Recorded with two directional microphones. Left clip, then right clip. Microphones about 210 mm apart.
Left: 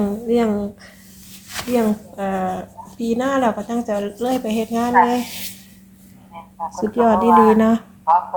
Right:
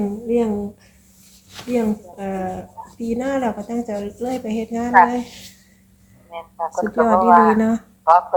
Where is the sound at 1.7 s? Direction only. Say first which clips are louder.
Left 2 dB; 25° left (ahead or behind).